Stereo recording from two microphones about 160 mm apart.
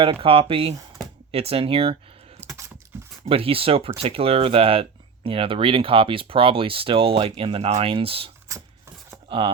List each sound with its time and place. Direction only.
0.0 s speech: 35° right (ahead or behind)
2.4 s keys jangling: 20° right (ahead or behind)
3.2 s speech: 35° right (ahead or behind)
9.3 s speech: 35° right (ahead or behind)